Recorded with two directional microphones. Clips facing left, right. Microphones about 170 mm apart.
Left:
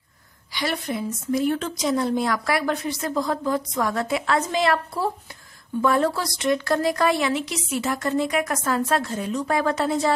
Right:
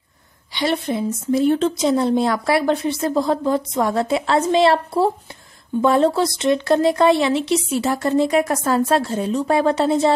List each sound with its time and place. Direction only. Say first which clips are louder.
0.5 s a woman's voice: right 6 dB; 25° right (ahead or behind)